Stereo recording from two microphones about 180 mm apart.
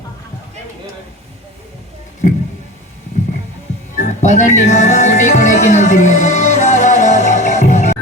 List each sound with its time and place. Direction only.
3.9 s music: 40° left (ahead or behind)